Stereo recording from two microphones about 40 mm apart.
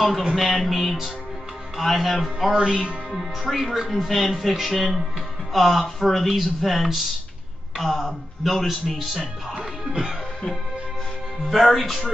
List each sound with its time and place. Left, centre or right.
0.4 s speech: centre
2.5 s speech: right
3.1 s speech: centre
9.6 s music: centre
11.5 s speech: centre